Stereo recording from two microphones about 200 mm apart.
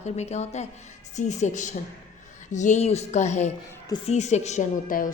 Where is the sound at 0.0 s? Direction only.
35° left (ahead or behind).